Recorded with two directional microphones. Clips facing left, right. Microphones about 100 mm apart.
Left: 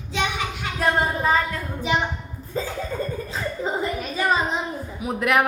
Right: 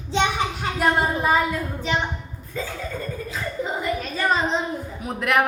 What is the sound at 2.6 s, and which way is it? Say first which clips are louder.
Chuckle: left 3 dB; 30° left (ahead or behind).